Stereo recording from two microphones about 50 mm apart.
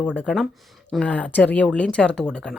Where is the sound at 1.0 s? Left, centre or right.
Left.